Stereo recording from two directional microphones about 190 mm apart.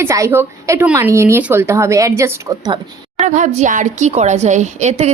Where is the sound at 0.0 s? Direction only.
15° right (ahead or behind).